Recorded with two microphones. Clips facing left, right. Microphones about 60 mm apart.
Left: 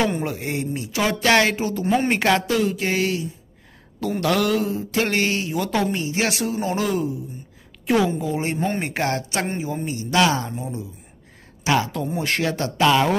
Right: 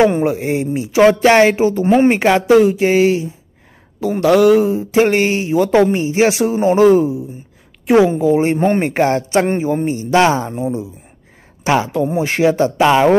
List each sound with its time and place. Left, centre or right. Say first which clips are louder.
0.0 s speech: right 10 dB; right
9.5 s a man's voice: right 10 dB; right
9.8 s speech: right 5 dB; right